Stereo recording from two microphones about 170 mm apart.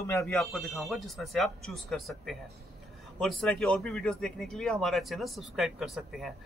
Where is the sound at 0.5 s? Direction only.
Centre (ahead or behind).